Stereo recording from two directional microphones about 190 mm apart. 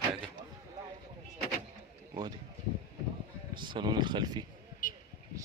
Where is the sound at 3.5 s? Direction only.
25° right (ahead or behind).